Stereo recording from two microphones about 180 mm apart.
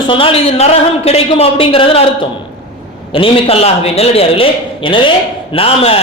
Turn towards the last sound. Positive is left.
turn(degrees=30)  # may be behind; listen again after turning